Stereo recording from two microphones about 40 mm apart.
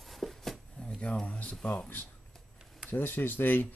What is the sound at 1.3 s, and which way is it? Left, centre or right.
Speech, left.